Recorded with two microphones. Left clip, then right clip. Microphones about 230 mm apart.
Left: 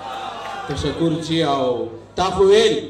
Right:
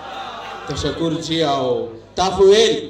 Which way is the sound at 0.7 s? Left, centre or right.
Right.